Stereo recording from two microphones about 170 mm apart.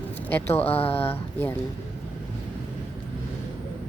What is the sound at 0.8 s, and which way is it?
Speech, 35° left (ahead or behind).